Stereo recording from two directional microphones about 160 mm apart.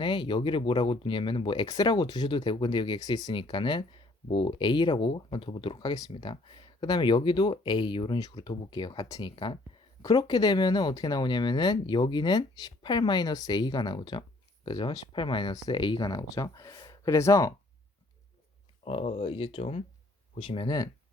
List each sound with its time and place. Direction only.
0.0 s speech: 30° left (ahead or behind)
18.9 s speech: 35° left (ahead or behind)